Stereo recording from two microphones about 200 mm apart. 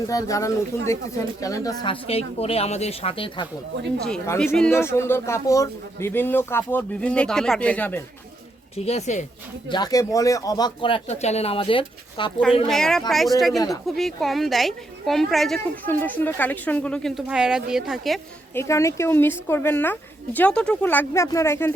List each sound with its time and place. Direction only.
0.1 s speech: 15° left (ahead or behind)
4.5 s a man's voice: 10° left (ahead or behind)
8.7 s speech: 30° left (ahead or behind)
9.6 s speech: 20° left (ahead or behind)
12.6 s a woman's voice: centre (ahead or behind)
18.5 s a man's voice: 15° left (ahead or behind)